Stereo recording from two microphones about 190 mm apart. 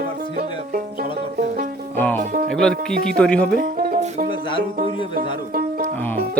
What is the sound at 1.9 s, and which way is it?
Music, 10° left (ahead or behind).